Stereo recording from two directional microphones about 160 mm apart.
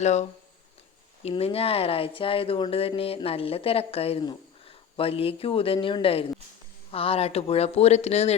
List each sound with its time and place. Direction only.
0.0 s speech: 45° left (ahead or behind)